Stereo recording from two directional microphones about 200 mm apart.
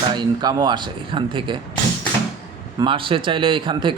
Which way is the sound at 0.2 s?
20° right (ahead or behind).